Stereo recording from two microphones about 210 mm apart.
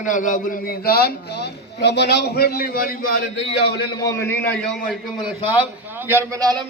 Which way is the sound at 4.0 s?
15° left (ahead or behind).